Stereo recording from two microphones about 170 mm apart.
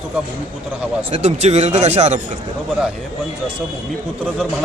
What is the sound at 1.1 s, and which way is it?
Speech, 40° right (ahead or behind).